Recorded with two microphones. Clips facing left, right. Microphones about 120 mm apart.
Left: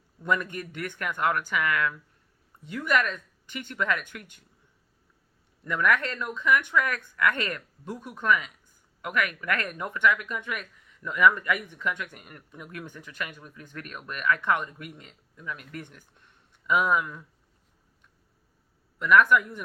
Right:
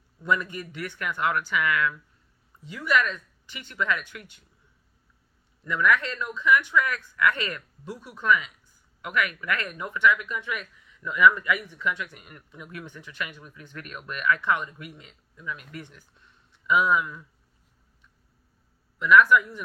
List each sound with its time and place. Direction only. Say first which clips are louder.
0.3 s speech: right 1 dB; 50° left (ahead or behind)
5.6 s speech: right 1 dB; 50° left (ahead or behind)
18.9 s speech: right 2 dB; 50° left (ahead or behind)